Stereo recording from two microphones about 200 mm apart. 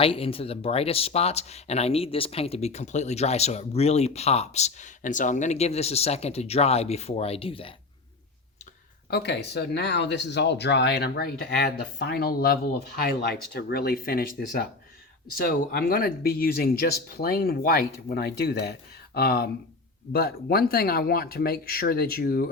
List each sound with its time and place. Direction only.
0.0 s speech: 30° left (ahead or behind)
9.0 s speech: 55° left (ahead or behind)